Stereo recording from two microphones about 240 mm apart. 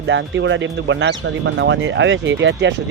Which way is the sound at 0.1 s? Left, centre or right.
Right.